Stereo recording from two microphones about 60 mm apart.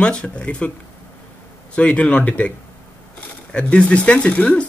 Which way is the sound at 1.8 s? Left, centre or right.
Left.